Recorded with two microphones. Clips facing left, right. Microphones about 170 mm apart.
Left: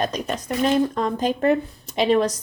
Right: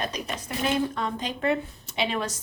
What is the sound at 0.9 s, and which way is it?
Speech, 45° left (ahead or behind).